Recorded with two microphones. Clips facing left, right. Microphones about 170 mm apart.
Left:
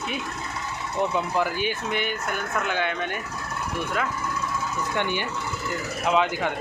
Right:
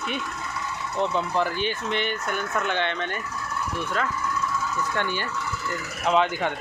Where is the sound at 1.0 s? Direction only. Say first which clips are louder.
Even; 10° left (ahead or behind).